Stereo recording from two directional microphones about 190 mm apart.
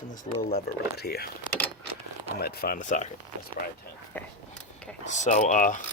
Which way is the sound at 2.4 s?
50° left (ahead or behind).